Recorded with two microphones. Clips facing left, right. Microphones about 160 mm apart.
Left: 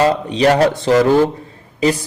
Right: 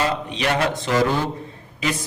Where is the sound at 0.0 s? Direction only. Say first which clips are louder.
Left 9 dB; 35° left (ahead or behind).